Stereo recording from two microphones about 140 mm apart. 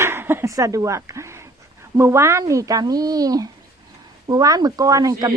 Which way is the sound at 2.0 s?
20° right (ahead or behind).